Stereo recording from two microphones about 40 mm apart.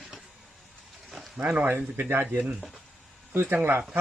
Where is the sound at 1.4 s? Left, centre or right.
Right.